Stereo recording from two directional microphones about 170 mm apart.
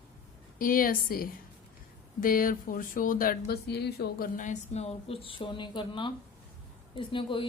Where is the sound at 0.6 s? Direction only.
55° left (ahead or behind).